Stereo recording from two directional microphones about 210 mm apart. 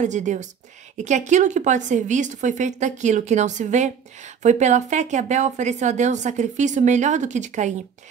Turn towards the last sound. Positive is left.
turn(degrees=-35)  # may be behind; listen again after turning